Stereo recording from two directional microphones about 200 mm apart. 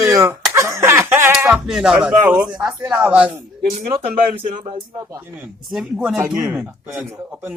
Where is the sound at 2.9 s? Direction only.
5° right (ahead or behind).